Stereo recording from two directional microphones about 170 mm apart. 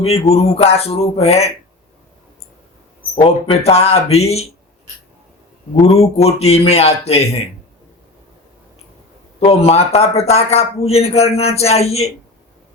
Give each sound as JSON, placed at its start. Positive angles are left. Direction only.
{"t": 0.0, "sound": "speech", "side_deg": 35}
{"t": 3.2, "sound": "speech", "side_deg": 35}
{"t": 5.9, "sound": "speech", "side_deg": 35}
{"t": 9.4, "sound": "speech", "side_deg": 35}